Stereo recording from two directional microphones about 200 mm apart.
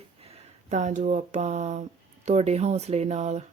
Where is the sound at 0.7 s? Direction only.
35° right (ahead or behind).